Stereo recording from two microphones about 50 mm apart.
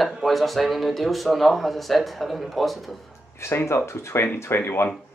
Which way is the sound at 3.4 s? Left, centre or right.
Left.